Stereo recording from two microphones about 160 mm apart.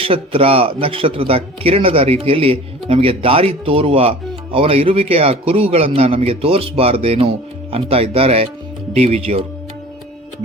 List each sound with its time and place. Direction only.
0.0 s speech: 35° right (ahead or behind)